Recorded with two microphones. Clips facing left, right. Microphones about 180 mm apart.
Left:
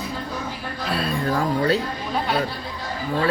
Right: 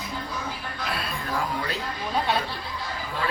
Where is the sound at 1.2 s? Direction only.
40° left (ahead or behind).